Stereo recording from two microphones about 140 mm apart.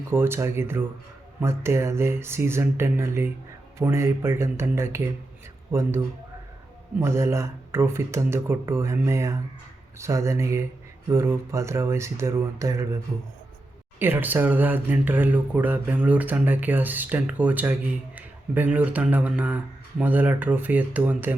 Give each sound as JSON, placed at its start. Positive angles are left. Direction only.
{"t": 0.1, "sound": "speech", "side_deg": -15}
{"t": 7.0, "sound": "speech", "side_deg": -20}
{"t": 14.0, "sound": "speech", "side_deg": -15}